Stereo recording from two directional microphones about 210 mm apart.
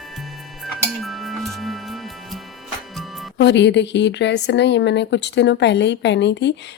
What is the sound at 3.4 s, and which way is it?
A woman's voice, 55° left (ahead or behind).